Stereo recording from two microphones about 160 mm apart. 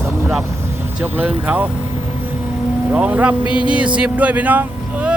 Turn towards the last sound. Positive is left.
turn(degrees=-10)  # may be behind; listen again after turning